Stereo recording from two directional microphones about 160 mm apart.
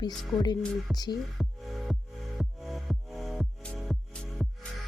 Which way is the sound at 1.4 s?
Centre (ahead or behind).